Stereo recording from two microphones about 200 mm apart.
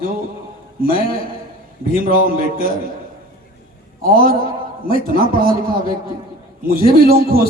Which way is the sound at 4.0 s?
45° right (ahead or behind).